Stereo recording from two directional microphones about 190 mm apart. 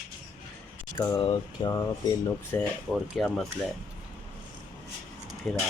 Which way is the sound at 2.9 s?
Centre (ahead or behind).